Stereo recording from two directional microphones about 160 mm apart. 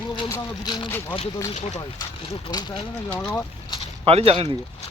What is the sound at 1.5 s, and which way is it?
Speech, 40° left (ahead or behind).